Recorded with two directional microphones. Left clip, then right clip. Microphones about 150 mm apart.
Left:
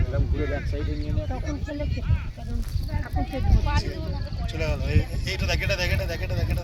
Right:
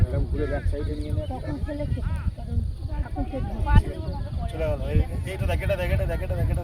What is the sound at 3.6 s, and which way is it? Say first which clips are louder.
Speech: right 1 dB; 35° right (ahead or behind).